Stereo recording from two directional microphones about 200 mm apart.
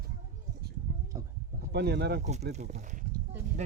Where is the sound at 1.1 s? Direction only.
15° right (ahead or behind).